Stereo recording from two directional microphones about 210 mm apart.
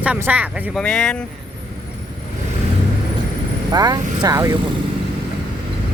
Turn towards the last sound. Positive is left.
turn(degrees=-15)  # may be behind; listen again after turning